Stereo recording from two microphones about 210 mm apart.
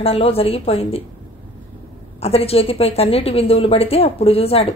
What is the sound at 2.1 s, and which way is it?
A woman's voice, 30° left (ahead or behind).